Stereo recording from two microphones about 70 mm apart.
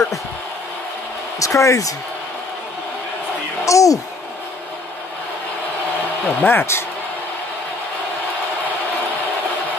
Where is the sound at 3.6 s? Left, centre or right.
Left.